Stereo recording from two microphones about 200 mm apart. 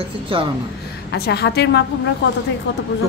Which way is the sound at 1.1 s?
55° left (ahead or behind).